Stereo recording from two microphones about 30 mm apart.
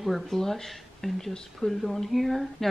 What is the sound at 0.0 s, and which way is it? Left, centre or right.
A woman's voice, centre.